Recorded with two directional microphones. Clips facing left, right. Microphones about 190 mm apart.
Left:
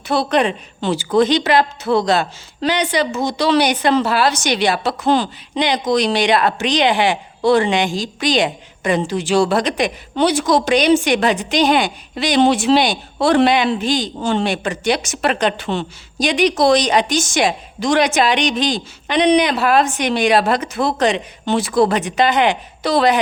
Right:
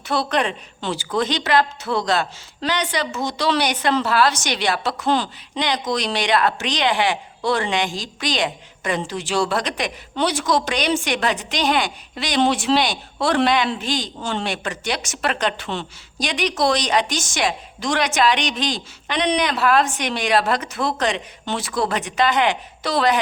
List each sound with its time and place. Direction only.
0.1 s a woman's voice: 10° left (ahead or behind)
3.2 s speech: 10° left (ahead or behind)
7.4 s speech: 10° left (ahead or behind)